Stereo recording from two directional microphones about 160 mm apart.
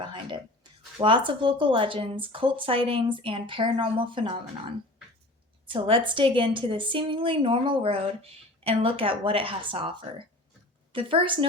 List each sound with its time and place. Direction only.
0.0 s a woman's voice: 30° right (ahead or behind)
5.7 s a woman's voice: 35° right (ahead or behind)